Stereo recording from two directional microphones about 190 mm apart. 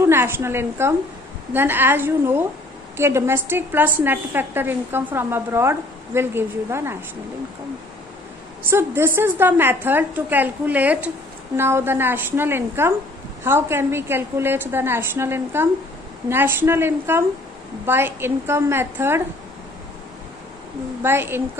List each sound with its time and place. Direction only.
0.0 s a woman's voice: 10° right (ahead or behind)
8.6 s a woman's voice: 10° right (ahead or behind)
21.0 s a woman's voice: 10° right (ahead or behind)